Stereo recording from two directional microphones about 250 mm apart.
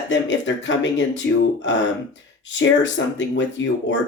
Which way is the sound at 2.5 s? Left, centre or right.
Left.